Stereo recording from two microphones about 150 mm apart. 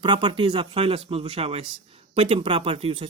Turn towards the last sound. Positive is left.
turn(degrees=-40)  # may be behind; listen again after turning